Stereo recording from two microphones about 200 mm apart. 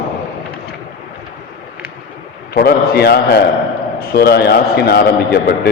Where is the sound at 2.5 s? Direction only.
50° left (ahead or behind).